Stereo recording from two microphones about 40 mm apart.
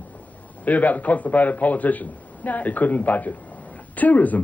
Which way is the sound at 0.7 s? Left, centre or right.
Left.